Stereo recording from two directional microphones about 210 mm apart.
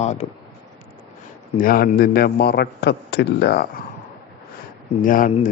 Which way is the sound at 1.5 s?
45° left (ahead or behind).